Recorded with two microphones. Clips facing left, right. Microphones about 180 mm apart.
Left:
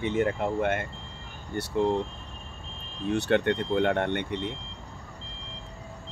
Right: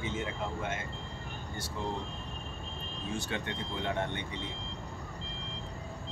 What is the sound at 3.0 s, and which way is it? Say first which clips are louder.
Speech: left 13 dB; 65° left (ahead or behind).